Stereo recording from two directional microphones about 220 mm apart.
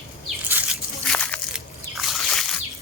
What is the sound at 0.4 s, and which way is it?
Slosh, 5° right (ahead or behind).